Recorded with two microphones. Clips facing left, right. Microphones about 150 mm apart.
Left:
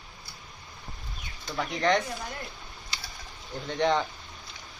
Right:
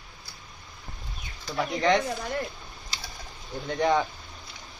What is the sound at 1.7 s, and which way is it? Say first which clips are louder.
Speech: right 2 dB; centre (ahead or behind).